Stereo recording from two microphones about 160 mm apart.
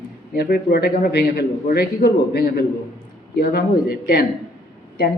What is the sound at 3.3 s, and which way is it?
Speech, 75° left (ahead or behind).